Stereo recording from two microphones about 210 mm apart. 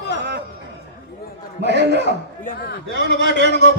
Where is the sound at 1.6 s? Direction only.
55° right (ahead or behind).